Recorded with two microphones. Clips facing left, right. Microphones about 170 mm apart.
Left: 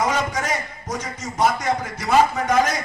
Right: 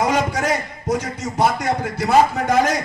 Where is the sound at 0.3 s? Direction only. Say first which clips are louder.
Right 4 dB; 70° right (ahead or behind).